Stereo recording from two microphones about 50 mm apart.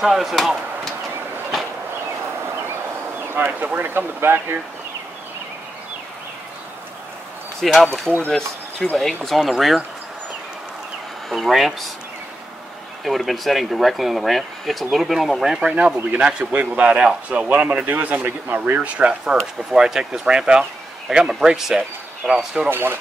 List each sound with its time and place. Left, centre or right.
0.0 s speech: centre
3.6 s speech: right
7.7 s speech: centre
8.3 s a sound: centre
8.9 s speech: centre
11.2 s speech: centre
13.0 s speech: centre
15.7 s a man's voice: right
18.8 s a man's voice: right
19.2 s speech: centre
22.7 s speech: right